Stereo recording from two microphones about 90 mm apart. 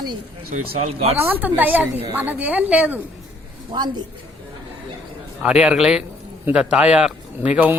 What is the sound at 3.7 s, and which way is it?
Speech, 55° right (ahead or behind).